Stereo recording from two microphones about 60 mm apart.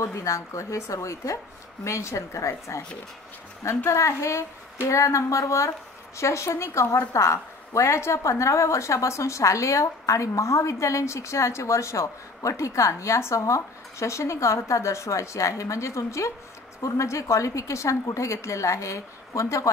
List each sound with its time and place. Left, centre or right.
0.0 s a woman's voice: left